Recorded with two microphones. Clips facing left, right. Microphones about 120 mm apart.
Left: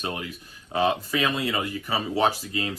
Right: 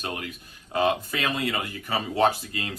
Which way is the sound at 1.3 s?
30° left (ahead or behind).